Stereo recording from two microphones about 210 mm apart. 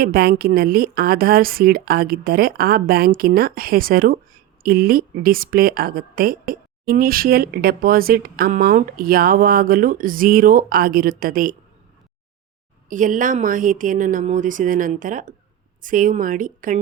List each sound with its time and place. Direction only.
0.0 s a woman's voice: 45° right (ahead or behind)
12.9 s speech: 40° right (ahead or behind)